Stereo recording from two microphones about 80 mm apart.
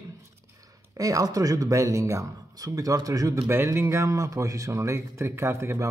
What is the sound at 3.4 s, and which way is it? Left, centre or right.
Speech, right.